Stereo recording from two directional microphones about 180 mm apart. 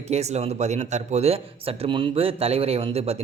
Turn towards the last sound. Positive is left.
turn(degrees=-35)  # may be behind; listen again after turning